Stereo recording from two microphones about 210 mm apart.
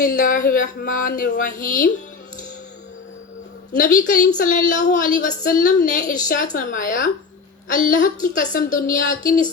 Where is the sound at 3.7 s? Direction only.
40° left (ahead or behind).